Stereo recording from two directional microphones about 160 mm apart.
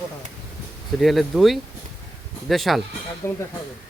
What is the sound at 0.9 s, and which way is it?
Speech, centre (ahead or behind).